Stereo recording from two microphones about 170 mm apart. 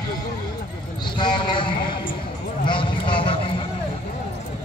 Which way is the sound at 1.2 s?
30° left (ahead or behind).